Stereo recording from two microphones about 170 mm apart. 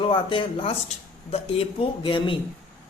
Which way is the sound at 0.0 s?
30° left (ahead or behind).